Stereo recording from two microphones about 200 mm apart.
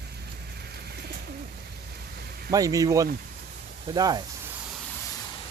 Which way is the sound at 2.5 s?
15° right (ahead or behind).